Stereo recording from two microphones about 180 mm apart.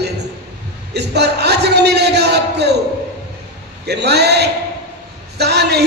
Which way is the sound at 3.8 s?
65° right (ahead or behind).